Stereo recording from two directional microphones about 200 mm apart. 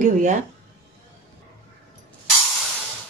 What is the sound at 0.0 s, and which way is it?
Speech, 40° right (ahead or behind).